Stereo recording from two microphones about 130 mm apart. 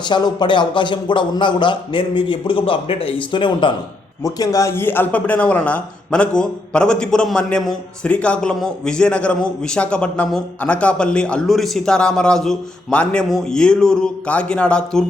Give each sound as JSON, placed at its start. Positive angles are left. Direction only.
{"t": 0.0, "sound": "speech", "side_deg": 35}
{"t": 4.2, "sound": "speech", "side_deg": 25}